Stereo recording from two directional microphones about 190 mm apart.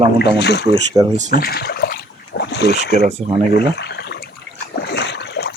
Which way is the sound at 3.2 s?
35° right (ahead or behind).